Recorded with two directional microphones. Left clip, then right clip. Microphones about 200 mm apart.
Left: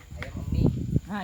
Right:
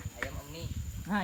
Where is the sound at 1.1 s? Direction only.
25° right (ahead or behind).